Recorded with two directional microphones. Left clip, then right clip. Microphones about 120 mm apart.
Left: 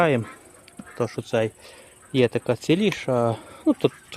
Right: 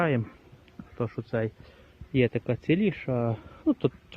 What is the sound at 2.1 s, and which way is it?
Speech, 25° left (ahead or behind).